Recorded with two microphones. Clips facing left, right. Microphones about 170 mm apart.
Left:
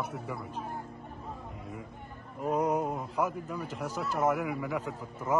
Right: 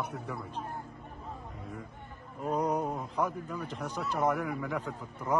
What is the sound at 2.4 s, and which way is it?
A man's voice, 5° left (ahead or behind).